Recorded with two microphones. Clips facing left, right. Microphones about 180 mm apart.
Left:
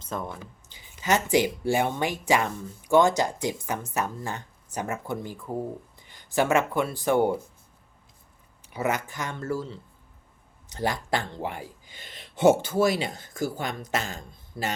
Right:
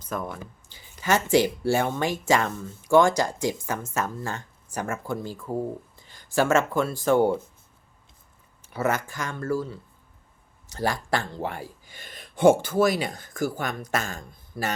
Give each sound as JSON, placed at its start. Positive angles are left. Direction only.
{"t": 0.0, "sound": "speech", "side_deg": 25}
{"t": 8.7, "sound": "speech", "side_deg": 15}
{"t": 12.2, "sound": "a sound", "side_deg": 20}
{"t": 12.8, "sound": "speech", "side_deg": 25}